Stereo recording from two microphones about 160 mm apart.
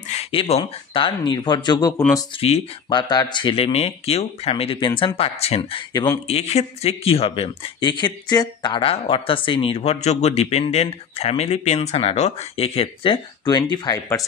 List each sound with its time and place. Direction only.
0.1 s speech: 35° left (ahead or behind); by 2.0 s 20° left (ahead or behind)
2.1 s speech: 35° left (ahead or behind)